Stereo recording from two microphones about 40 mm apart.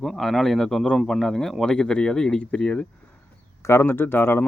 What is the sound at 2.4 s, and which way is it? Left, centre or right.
Speech, left.